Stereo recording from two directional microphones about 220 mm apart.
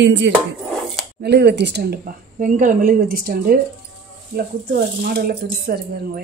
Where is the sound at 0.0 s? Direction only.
55° right (ahead or behind).